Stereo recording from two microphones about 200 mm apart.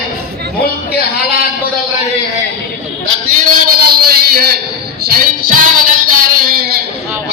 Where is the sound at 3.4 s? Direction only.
50° right (ahead or behind).